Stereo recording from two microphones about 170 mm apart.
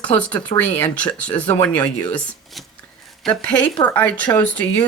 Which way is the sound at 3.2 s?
5° left (ahead or behind).